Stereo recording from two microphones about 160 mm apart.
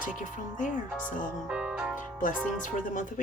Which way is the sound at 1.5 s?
5° right (ahead or behind).